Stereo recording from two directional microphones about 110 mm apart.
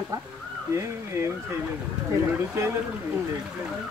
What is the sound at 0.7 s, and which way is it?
Speech, 25° right (ahead or behind).